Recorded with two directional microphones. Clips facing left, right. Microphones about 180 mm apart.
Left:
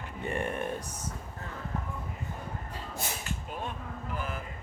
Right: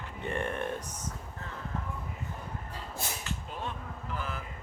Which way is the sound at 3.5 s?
10° left (ahead or behind).